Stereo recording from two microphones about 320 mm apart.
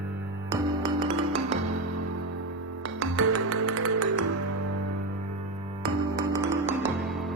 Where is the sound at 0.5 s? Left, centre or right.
Centre.